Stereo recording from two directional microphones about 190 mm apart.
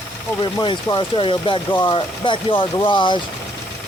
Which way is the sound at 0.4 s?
25° left (ahead or behind).